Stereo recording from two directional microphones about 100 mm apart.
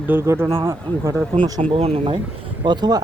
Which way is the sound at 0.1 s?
20° right (ahead or behind).